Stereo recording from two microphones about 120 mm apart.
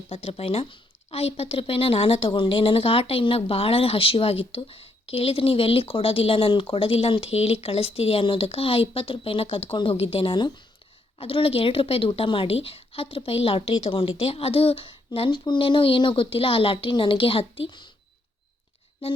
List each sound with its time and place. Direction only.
0.1 s a woman's voice: 55° left (ahead or behind)
19.0 s a woman's voice: 50° left (ahead or behind)